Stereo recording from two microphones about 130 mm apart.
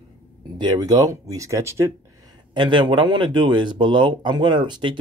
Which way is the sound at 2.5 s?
35° right (ahead or behind).